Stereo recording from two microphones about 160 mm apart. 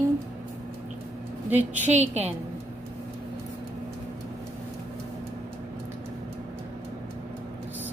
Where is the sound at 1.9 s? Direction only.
45° right (ahead or behind).